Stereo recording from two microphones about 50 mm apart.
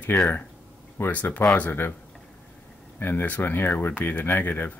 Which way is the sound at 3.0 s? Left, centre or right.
Left.